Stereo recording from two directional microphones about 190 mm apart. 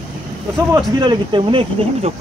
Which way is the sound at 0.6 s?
20° right (ahead or behind).